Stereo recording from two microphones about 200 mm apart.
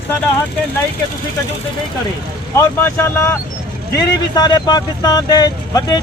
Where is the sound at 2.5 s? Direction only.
15° left (ahead or behind).